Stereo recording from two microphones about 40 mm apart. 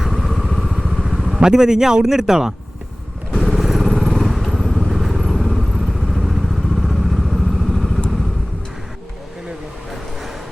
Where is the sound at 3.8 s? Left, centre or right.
Centre.